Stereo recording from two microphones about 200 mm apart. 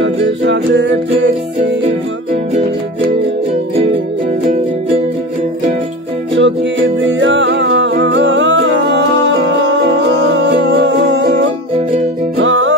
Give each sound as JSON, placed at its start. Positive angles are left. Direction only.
{"t": 0.0, "sound": "music", "side_deg": -65}
{"t": 6.3, "sound": "music", "side_deg": -65}